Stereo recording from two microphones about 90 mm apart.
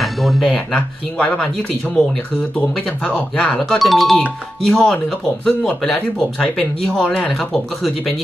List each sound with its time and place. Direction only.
0.0 s a sound: centre (ahead or behind)
1.1 s speech: 15° left (ahead or behind)
3.2 s speech: 10° left (ahead or behind)
3.7 s speech: centre (ahead or behind)